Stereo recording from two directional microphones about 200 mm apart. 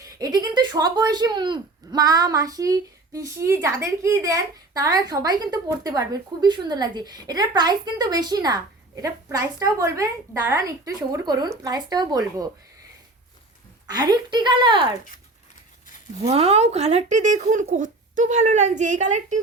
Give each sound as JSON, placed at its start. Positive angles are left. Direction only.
{"t": 0.2, "sound": "speech", "side_deg": -20}
{"t": 13.8, "sound": "speech", "side_deg": -20}
{"t": 16.2, "sound": "speech", "side_deg": -30}